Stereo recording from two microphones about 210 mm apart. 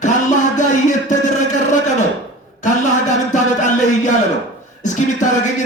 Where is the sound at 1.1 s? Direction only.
35° left (ahead or behind).